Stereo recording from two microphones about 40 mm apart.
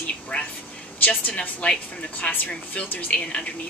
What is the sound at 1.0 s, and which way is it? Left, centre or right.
Speech, left.